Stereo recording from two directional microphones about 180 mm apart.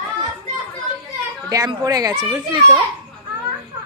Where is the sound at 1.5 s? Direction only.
20° right (ahead or behind).